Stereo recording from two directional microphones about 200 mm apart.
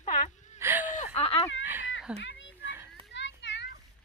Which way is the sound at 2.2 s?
70° left (ahead or behind).